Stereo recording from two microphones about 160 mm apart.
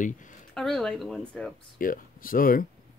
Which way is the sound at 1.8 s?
60° left (ahead or behind).